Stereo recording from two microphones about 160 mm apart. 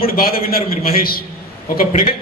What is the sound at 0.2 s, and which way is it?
Speech, 70° left (ahead or behind).